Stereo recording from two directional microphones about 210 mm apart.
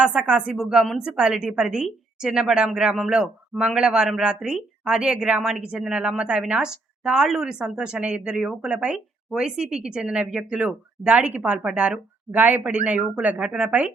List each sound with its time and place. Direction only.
0.0 s a woman's voice: centre (ahead or behind)